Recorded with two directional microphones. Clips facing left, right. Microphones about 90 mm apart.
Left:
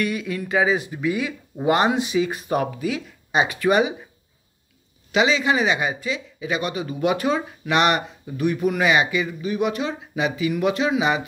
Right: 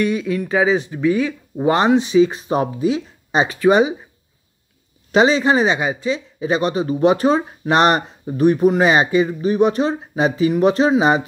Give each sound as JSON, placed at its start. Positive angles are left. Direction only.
{"t": 0.7, "sound": "speech", "side_deg": -30}
{"t": 0.9, "sound": "speech", "side_deg": 10}
{"t": 1.6, "sound": "speech", "side_deg": -30}
{"t": 5.1, "sound": "speech", "side_deg": -35}